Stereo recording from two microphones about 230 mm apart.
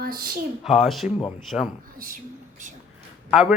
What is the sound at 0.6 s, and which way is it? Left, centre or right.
A man's voice, centre.